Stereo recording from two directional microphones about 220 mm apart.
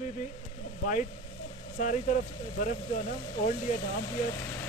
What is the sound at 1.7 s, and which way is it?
Speech, 35° left (ahead or behind).